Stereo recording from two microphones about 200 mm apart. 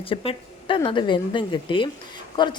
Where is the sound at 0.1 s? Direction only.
25° left (ahead or behind).